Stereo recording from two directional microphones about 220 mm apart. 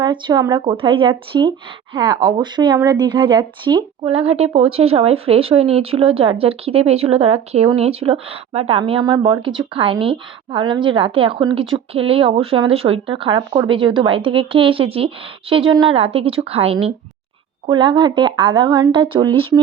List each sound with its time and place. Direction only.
0.0 s speech: 20° right (ahead or behind)